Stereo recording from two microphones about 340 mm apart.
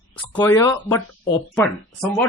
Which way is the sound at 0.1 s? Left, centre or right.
Centre.